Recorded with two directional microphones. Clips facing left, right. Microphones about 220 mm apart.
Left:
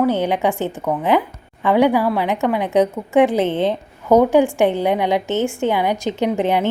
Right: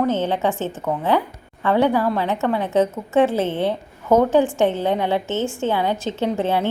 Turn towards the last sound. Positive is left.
turn(degrees=15)  # may be behind; listen again after turning